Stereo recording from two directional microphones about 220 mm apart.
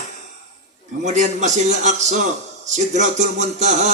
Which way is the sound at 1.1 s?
30° right (ahead or behind).